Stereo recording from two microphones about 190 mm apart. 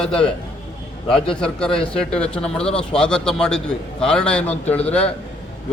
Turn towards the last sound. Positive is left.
turn(degrees=5)  # may be behind; listen again after turning